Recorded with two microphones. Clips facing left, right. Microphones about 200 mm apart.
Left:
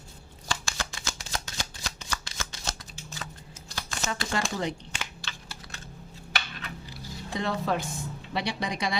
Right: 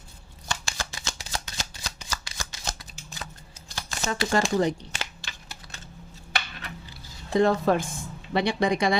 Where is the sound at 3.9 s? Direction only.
40° right (ahead or behind).